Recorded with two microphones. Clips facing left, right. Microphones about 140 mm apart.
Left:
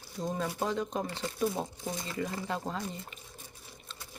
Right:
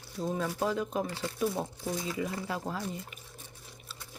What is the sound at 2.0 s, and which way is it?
Speech, 5° right (ahead or behind).